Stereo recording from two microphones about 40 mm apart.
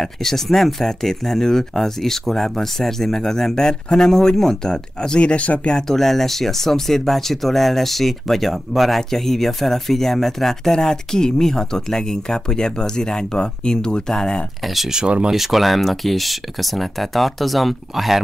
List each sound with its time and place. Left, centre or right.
0.0 s speech: centre; by 5.8 s left
5.8 s speech: centre
15.0 s speech: right
15.3 s speech: centre